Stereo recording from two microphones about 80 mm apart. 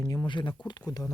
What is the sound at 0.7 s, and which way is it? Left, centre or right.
Speech, left.